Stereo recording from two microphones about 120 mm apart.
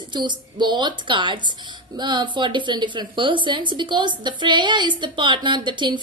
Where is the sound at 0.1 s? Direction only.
40° right (ahead or behind).